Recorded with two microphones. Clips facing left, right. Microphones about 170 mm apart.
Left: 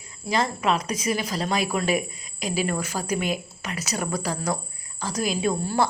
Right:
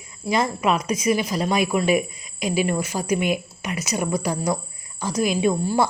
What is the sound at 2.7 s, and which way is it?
Speech, 10° right (ahead or behind).